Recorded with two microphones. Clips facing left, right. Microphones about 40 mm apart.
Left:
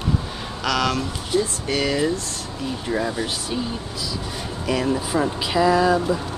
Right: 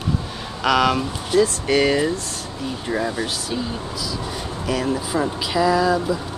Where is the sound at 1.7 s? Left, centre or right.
Right.